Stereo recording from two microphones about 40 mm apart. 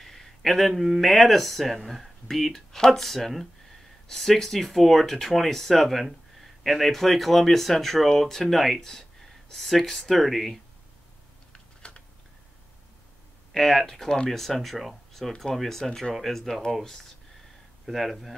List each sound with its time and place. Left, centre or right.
0.0 s speech: centre
11.5 s typing: left
13.5 s speech: centre
14.3 s speech: centre